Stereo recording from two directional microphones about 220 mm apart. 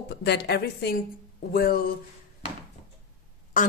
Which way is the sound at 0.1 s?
50° left (ahead or behind).